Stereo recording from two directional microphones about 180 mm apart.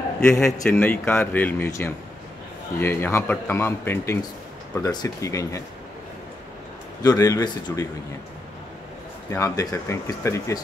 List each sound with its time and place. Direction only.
0.3 s a man's voice: 5° left (ahead or behind)
7.0 s a man's voice: 20° left (ahead or behind)
9.3 s speech: 15° left (ahead or behind)